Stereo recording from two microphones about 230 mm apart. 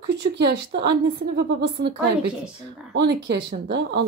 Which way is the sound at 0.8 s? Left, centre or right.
Right.